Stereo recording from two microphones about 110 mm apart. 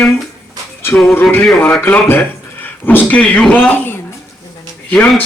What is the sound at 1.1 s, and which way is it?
A man's voice, 20° left (ahead or behind).